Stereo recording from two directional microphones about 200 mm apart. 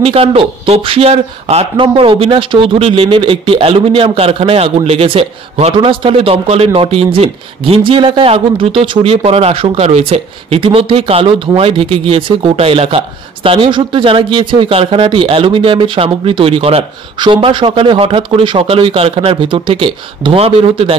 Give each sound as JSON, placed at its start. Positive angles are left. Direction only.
{"t": 0.0, "sound": "speech", "side_deg": -30}